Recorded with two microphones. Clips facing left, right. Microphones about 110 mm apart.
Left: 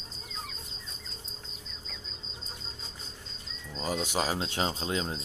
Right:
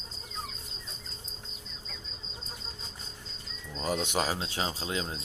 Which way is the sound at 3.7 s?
5° left (ahead or behind).